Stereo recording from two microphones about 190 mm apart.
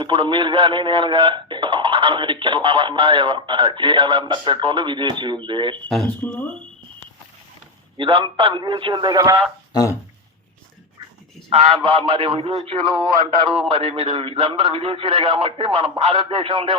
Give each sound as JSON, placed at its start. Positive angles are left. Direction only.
{"t": 0.0, "sound": "a man's voice", "side_deg": -25}
{"t": 5.8, "sound": "speech", "side_deg": 5}
{"t": 7.9, "sound": "a man's voice", "side_deg": -25}
{"t": 9.7, "sound": "speech", "side_deg": 15}
{"t": 11.8, "sound": "a man's voice", "side_deg": -30}